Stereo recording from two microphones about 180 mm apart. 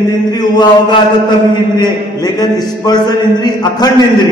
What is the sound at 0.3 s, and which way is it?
Speech, 25° left (ahead or behind).